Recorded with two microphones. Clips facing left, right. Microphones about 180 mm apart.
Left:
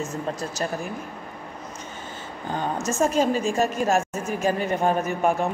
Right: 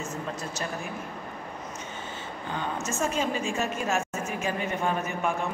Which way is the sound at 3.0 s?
40° left (ahead or behind).